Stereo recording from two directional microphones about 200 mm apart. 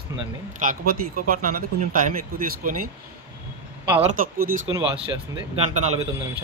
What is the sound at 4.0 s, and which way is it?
Speech, 45° right (ahead or behind).